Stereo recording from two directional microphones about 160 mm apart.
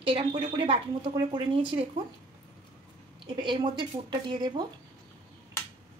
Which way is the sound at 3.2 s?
30° right (ahead or behind).